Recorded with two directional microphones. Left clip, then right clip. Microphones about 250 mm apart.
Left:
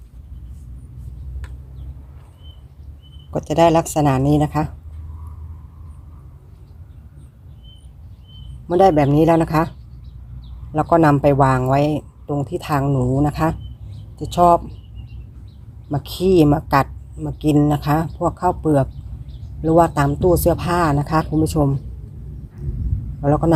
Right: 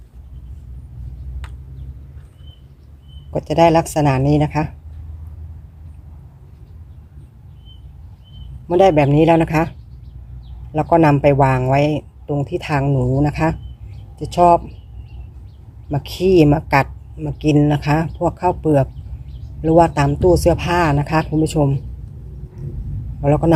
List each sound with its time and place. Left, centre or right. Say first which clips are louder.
3.3 s speech: right 1 dB; centre
8.6 s speech: right 1 dB; centre
16.0 s speech: right 2 dB; centre
23.2 s speech: right 1 dB; centre